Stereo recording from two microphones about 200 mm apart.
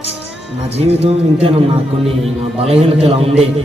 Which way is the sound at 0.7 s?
30° right (ahead or behind).